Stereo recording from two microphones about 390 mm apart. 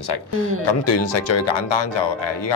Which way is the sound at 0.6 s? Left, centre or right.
Left.